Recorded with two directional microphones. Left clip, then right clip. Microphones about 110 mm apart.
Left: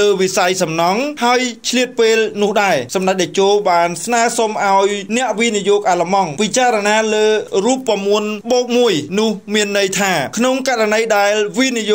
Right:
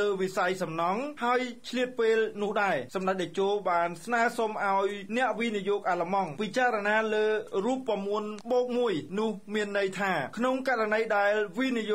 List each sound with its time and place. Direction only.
0.0 s a man's voice: 35° left (ahead or behind)
7.9 s a man's voice: 35° left (ahead or behind)